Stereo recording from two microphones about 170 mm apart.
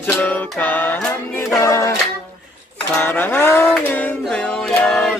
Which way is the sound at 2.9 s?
10° left (ahead or behind).